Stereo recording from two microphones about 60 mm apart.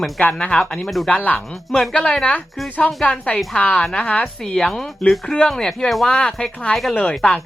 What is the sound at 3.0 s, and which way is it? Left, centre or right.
A woman's voice, centre.